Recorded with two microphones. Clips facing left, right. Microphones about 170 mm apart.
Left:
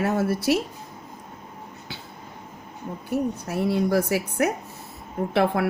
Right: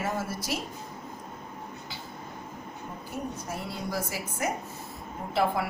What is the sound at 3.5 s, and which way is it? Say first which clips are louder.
Speech: left 15 dB; 65° left (ahead or behind).